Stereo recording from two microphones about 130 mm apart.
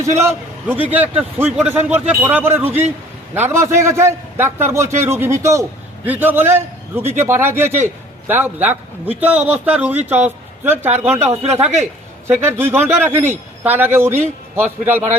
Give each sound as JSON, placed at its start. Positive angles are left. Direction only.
{"t": 0.0, "sound": "a man's voice", "side_deg": -20}